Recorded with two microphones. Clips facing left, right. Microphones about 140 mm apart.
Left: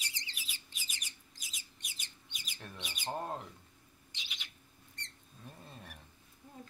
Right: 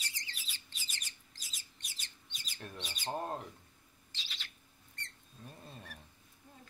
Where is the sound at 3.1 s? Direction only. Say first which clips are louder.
Right 1 dB; 10° right (ahead or behind).